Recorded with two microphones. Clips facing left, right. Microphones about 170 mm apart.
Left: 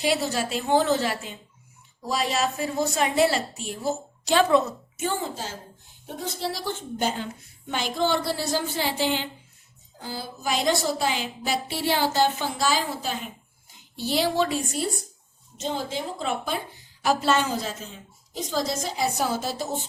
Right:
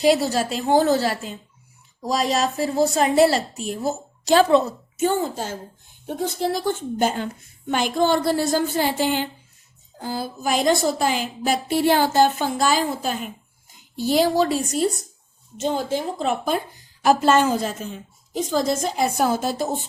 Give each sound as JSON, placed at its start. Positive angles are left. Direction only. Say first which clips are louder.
{"t": 0.0, "sound": "a woman's voice", "louder": "right 6 dB", "side_deg": -40}
{"t": 4.9, "sound": "a woman's voice", "louder": "right 7 dB", "side_deg": -50}